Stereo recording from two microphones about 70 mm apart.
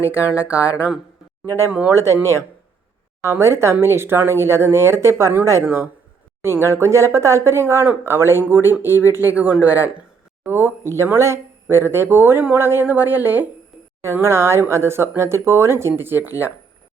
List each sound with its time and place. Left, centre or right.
0.0 s speech: right
1.5 s speech: left
1.9 s speech: right
3.2 s speech: right
6.4 s speech: right
9.3 s speech: right
10.8 s speech: right
14.0 s speech: right